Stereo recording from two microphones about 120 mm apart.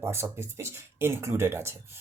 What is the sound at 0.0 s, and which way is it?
Speech, 20° right (ahead or behind).